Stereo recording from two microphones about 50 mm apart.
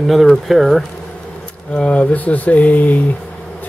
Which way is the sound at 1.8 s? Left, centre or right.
Left.